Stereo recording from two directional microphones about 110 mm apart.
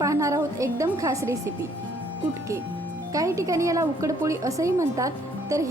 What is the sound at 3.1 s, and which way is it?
A woman's voice, 30° right (ahead or behind).